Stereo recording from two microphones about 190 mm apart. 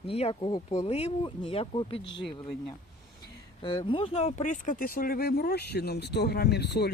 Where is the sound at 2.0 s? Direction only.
70° left (ahead or behind).